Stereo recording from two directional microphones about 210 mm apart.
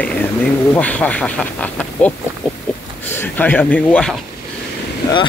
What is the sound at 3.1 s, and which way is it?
Speech, 10° left (ahead or behind).